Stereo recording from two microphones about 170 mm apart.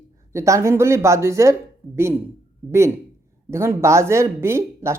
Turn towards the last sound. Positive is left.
turn(degrees=-15)  # may be behind; listen again after turning